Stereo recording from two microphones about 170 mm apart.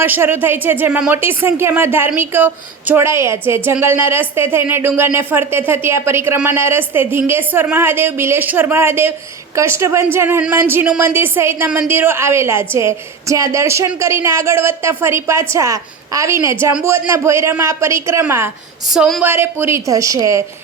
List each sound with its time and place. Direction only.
0.0 s speech: 10° right (ahead or behind)
18.9 s speech: centre (ahead or behind)
19.2 s speech: 10° right (ahead or behind)